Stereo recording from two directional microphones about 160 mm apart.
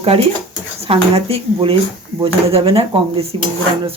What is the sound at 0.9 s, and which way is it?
Speech, 40° right (ahead or behind).